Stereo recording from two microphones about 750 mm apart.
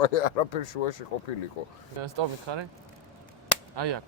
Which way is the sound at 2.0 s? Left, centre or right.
Right.